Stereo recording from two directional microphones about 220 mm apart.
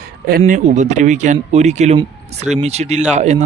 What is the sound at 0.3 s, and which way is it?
Speech, 40° right (ahead or behind).